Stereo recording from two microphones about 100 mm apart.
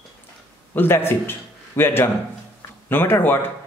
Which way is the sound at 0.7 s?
20° left (ahead or behind).